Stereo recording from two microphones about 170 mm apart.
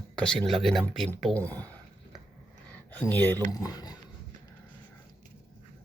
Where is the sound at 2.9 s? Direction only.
10° left (ahead or behind).